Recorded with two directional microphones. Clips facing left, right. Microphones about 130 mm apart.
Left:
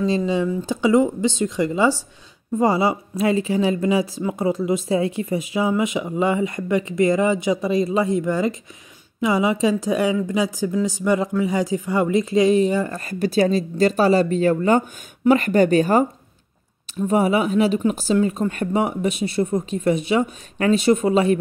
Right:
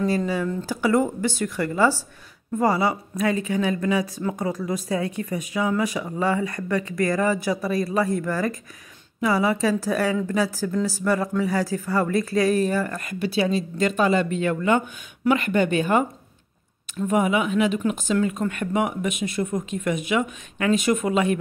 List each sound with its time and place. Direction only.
0.7 s speech: 20° left (ahead or behind); by 16.1 s 35° left (ahead or behind)
17.1 s speech: 35° left (ahead or behind)